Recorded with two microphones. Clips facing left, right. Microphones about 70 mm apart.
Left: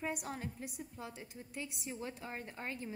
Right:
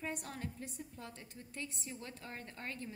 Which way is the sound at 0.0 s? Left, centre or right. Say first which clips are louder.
Left 2 dB; centre.